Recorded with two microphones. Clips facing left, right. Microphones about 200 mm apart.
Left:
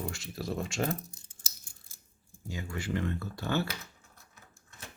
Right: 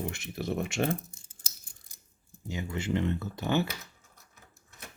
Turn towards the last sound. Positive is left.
turn(degrees=-20)  # may be behind; listen again after turning